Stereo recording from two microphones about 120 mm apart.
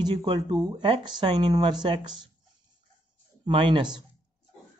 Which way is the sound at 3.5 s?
45° right (ahead or behind).